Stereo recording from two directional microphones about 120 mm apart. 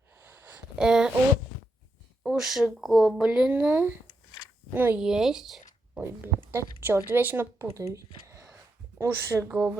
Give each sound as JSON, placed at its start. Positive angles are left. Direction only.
{"t": 0.2, "sound": "a sound", "side_deg": -15}
{"t": 2.2, "sound": "speech", "side_deg": 0}
{"t": 4.9, "sound": "speech", "side_deg": -5}
{"t": 6.0, "sound": "speech", "side_deg": -20}